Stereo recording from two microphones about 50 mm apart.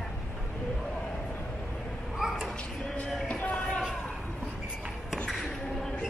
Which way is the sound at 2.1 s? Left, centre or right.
Centre.